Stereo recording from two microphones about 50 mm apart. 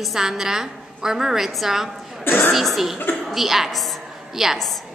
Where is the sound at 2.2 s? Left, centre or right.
Left.